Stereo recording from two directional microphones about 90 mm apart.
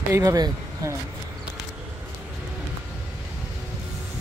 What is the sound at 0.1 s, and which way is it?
Speech, 40° right (ahead or behind).